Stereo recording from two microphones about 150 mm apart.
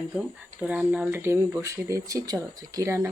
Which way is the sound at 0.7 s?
10° right (ahead or behind).